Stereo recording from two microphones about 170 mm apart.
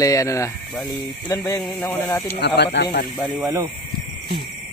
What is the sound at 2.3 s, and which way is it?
Speech, 90° left.